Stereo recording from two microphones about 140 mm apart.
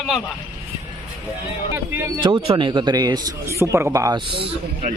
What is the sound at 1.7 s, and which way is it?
Speech, 15° right (ahead or behind).